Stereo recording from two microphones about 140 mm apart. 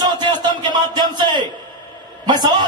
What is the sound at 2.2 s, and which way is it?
Speech, 30° right (ahead or behind).